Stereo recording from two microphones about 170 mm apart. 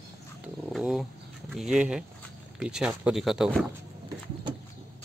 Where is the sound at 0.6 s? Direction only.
Centre (ahead or behind).